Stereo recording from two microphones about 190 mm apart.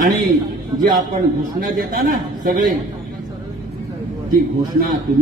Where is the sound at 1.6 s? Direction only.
45° right (ahead or behind).